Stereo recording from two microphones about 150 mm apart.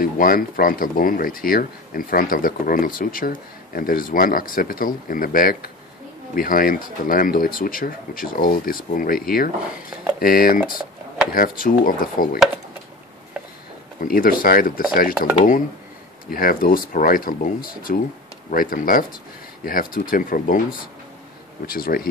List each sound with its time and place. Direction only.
0.0 s speech: 70° left (ahead or behind)
14.0 s speech: 70° left (ahead or behind)
16.3 s speech: 70° left (ahead or behind)
21.6 s speech: 75° left (ahead or behind)